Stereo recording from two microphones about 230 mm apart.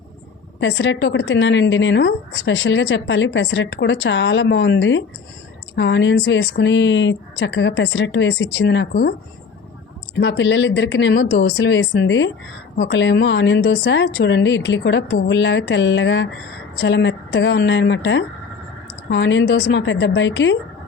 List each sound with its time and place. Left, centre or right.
0.6 s a woman's voice: left
10.2 s a woman's voice: left